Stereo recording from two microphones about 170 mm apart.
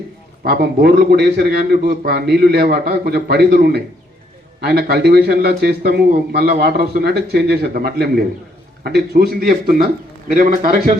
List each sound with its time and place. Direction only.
0.5 s a man's voice: 70° right (ahead or behind); by 10.7 s 50° right (ahead or behind)